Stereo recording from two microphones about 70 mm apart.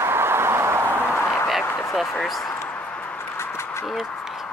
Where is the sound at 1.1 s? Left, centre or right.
Left.